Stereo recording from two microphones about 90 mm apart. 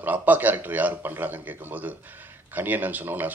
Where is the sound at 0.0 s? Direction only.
20° right (ahead or behind).